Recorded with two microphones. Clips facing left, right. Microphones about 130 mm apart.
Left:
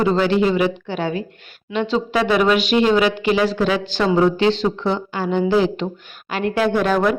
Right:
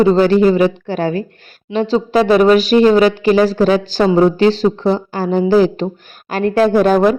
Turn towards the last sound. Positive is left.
turn(degrees=-40)  # may be behind; listen again after turning